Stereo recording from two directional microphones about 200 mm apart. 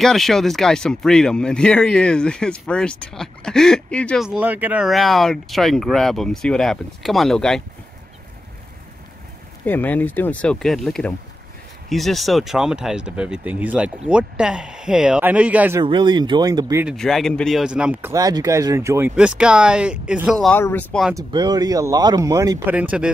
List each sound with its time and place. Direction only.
0.0 s speech: centre (ahead or behind)
9.7 s speech: 10° left (ahead or behind); by 15.8 s 10° right (ahead or behind)
15.8 s speech: 25° right (ahead or behind)
16.8 s speech: centre (ahead or behind)
18.1 s speech: 15° right (ahead or behind); by 21.1 s 5° left (ahead or behind)
21.1 s speech: 20° right (ahead or behind)
22.8 s speech: 5° right (ahead or behind)